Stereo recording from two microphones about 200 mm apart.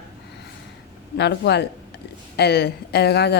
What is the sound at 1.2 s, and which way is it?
A woman's voice, 55° left (ahead or behind).